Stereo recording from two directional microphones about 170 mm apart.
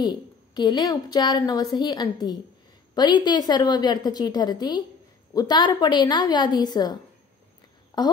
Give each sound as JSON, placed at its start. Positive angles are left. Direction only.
{"t": 0.0, "sound": "a woman's voice", "side_deg": 25}